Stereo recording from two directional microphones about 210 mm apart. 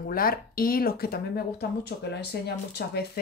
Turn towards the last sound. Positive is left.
turn(degrees=50)  # may be behind; listen again after turning